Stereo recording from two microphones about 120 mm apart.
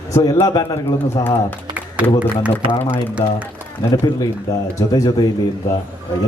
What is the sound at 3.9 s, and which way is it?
Speech, 30° left (ahead or behind).